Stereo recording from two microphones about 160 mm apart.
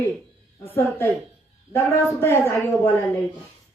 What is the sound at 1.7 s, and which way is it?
A man's voice, 15° left (ahead or behind).